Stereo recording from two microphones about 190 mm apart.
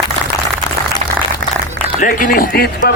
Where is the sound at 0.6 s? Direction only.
20° left (ahead or behind).